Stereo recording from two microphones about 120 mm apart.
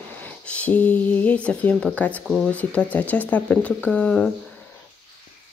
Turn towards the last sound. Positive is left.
turn(degrees=5)  # may be behind; listen again after turning